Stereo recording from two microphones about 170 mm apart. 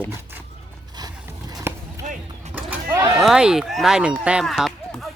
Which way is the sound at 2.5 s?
10° right (ahead or behind).